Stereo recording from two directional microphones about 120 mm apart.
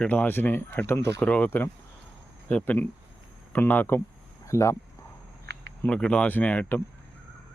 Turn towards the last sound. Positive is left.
turn(degrees=15)  # may be behind; listen again after turning